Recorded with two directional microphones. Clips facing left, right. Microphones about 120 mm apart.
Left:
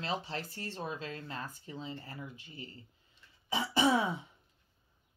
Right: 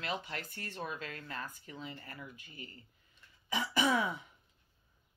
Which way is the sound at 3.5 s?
30° left (ahead or behind).